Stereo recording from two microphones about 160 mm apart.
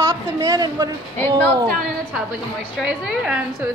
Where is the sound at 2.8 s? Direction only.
5° right (ahead or behind).